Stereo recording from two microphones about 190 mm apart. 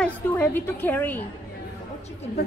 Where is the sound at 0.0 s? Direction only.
10° left (ahead or behind).